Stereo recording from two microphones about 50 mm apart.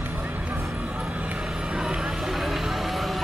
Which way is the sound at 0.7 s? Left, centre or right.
Right.